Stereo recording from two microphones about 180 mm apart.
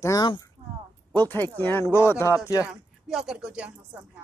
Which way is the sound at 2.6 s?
5° right (ahead or behind).